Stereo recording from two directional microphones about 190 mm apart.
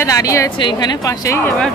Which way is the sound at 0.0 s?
15° left (ahead or behind).